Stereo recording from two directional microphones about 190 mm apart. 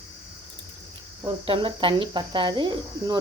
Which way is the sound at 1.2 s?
25° right (ahead or behind).